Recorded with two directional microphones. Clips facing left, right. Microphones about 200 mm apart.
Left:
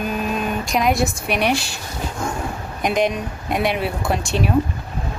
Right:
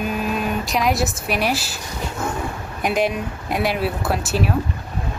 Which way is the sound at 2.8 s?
5° right (ahead or behind).